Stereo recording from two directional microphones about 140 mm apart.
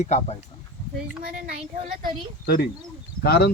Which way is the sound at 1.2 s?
90° right.